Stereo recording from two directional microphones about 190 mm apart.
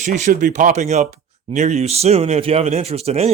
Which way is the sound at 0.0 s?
40° right (ahead or behind).